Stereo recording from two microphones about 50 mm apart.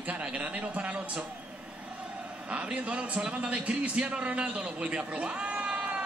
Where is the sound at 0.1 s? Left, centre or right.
Right.